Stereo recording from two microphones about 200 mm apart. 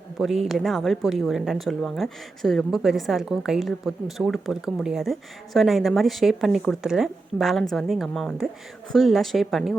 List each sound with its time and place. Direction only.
0.2 s a woman's voice: centre (ahead or behind)